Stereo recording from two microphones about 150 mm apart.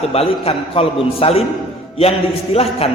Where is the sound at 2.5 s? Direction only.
40° left (ahead or behind).